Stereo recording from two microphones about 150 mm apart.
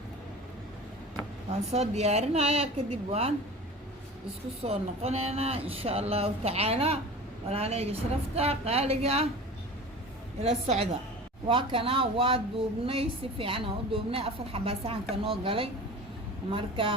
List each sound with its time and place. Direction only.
1.5 s speech: 45° right (ahead or behind)
4.6 s a woman's voice: 40° right (ahead or behind)
10.4 s a woman's voice: 40° right (ahead or behind)